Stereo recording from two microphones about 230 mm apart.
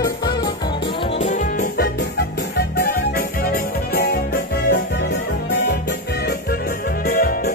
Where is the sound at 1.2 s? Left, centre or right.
Left.